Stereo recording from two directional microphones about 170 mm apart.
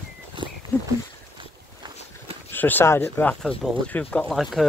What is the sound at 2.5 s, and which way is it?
Speech, 10° left (ahead or behind).